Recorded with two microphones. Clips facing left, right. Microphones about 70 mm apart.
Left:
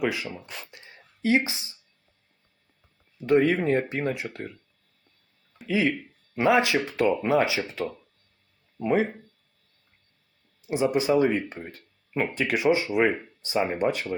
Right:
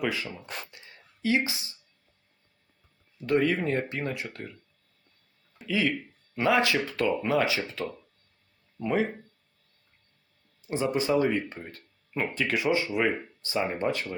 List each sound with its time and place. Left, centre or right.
0.0 s speech: centre
0.7 s a sound: left
3.2 s speech: left
5.6 s speech: left
8.8 s speech: centre
10.7 s speech: centre